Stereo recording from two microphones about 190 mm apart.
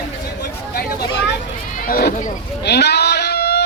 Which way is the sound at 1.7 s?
50° left (ahead or behind).